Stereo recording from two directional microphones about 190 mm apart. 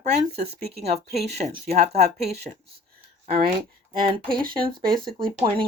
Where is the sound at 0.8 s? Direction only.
35° right (ahead or behind).